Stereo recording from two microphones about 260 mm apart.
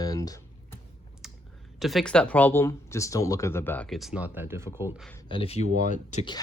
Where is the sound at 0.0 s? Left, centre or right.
Centre.